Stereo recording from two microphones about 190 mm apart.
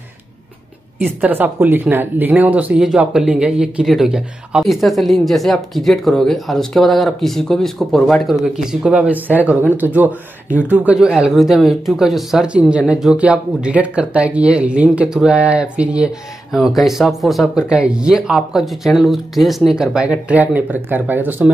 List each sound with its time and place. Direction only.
1.2 s speech: 10° right (ahead or behind)